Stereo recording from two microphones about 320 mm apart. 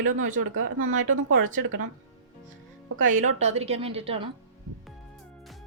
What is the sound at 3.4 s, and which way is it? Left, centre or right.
Speech, centre.